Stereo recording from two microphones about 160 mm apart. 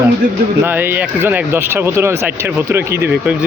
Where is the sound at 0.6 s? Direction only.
10° right (ahead or behind).